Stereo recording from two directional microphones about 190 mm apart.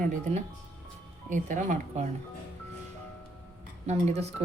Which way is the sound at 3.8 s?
35° right (ahead or behind).